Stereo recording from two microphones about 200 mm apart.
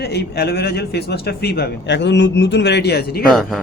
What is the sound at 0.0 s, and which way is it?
A man's voice, 55° left (ahead or behind).